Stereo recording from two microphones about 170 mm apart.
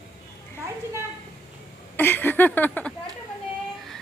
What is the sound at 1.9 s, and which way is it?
Speech, 10° left (ahead or behind).